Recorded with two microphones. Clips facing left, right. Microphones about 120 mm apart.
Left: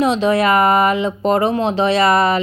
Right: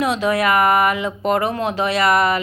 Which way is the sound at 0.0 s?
25° left (ahead or behind).